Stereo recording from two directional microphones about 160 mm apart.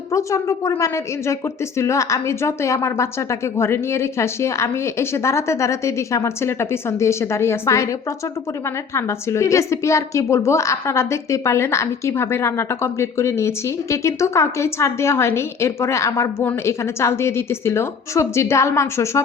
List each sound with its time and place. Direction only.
0.1 s a woman's voice: 20° left (ahead or behind)
9.0 s a woman's voice: 15° left (ahead or behind)